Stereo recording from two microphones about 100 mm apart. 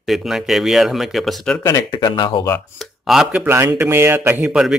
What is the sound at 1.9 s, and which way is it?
Speech, 55° left (ahead or behind).